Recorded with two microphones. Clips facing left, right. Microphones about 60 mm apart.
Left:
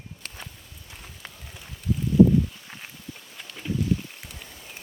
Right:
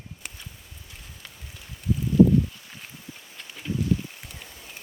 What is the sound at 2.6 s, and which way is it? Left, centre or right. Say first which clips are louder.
Walk: left 2 dB; centre.